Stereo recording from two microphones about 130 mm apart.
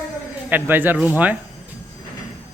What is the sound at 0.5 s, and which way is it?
Speech, 15° right (ahead or behind).